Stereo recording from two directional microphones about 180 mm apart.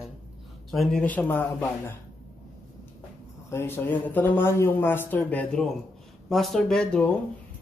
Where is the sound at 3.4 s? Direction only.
10° left (ahead or behind).